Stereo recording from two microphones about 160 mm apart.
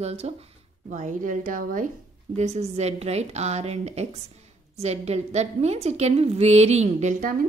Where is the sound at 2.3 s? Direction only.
45° right (ahead or behind).